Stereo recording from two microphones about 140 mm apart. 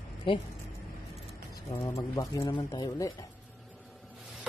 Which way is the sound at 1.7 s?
25° left (ahead or behind).